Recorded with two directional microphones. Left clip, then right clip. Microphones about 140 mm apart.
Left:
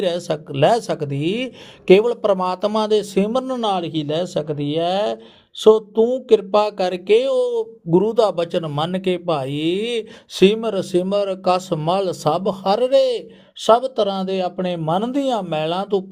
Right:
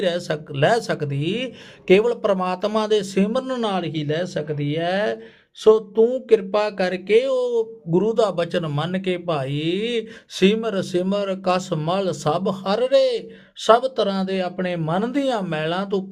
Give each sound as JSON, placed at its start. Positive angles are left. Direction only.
{"t": 0.0, "sound": "speech", "side_deg": 30}
{"t": 3.4, "sound": "speech", "side_deg": 20}
{"t": 3.7, "sound": "speech", "side_deg": 30}